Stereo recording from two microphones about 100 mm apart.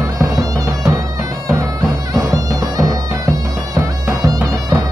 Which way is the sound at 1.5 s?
40° right (ahead or behind).